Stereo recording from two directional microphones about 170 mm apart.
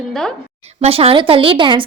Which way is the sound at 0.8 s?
35° right (ahead or behind).